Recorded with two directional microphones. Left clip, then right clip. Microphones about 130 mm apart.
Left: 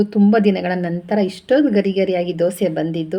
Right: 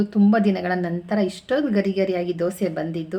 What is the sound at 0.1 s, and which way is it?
A woman's voice, 15° left (ahead or behind).